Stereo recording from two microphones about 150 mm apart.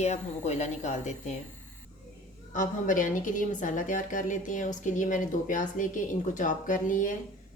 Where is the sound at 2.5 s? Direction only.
60° left (ahead or behind).